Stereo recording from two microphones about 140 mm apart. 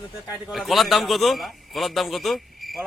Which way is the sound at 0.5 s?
Centre (ahead or behind).